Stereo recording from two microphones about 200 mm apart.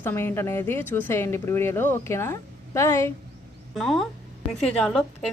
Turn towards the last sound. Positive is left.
turn(degrees=5)  # may be behind; listen again after turning